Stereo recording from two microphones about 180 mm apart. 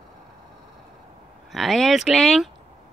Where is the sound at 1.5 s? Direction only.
Centre (ahead or behind).